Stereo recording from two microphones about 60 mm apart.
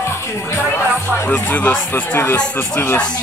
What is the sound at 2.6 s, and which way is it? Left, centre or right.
Speech, left.